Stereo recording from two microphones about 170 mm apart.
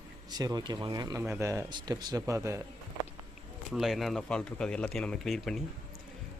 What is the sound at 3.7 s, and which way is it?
Speech, centre (ahead or behind).